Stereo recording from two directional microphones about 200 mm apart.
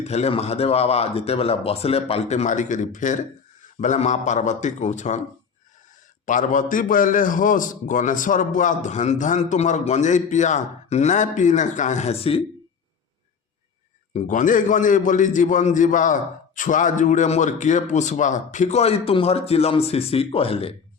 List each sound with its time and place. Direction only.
0.0 s a man's voice: 30° left (ahead or behind)
6.2 s a man's voice: 40° left (ahead or behind)
14.1 s a man's voice: 35° left (ahead or behind)